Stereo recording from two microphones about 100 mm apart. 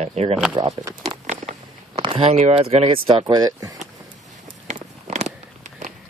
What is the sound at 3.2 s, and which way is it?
Speech, 40° right (ahead or behind).